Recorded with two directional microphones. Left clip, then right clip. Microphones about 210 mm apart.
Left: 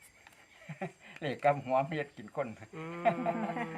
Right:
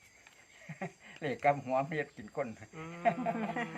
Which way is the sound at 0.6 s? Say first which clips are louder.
Left 1 dB; centre (ahead or behind).